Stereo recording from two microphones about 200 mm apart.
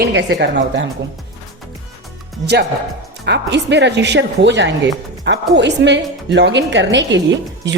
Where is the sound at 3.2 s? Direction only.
55° right (ahead or behind).